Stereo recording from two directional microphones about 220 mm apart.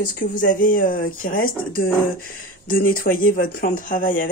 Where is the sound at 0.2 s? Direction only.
35° left (ahead or behind).